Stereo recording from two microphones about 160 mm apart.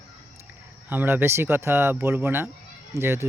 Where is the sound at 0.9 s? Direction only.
10° right (ahead or behind).